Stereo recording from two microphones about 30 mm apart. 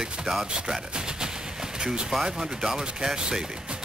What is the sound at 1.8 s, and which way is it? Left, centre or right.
Speech, right.